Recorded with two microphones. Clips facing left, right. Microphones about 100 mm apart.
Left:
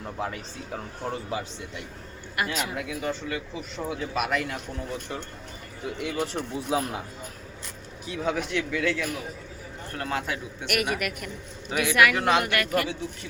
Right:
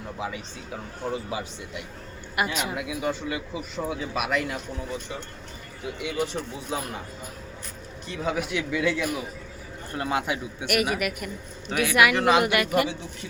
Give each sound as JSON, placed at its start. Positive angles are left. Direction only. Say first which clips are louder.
{"t": 0.2, "sound": "speech", "louder": "left 1 dB", "side_deg": 0}
{"t": 2.3, "sound": "a man's voice", "louder": "right 2 dB", "side_deg": -15}
{"t": 8.0, "sound": "a man's voice", "louder": "even", "side_deg": 0}
{"t": 10.7, "sound": "a man's voice", "louder": "right 2 dB", "side_deg": -5}
{"t": 12.5, "sound": "a man's voice", "louder": "right 3 dB", "side_deg": -15}